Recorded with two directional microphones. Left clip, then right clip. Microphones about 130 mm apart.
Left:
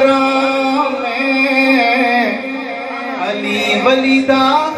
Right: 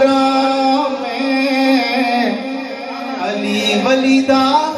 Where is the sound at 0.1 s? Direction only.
35° right (ahead or behind).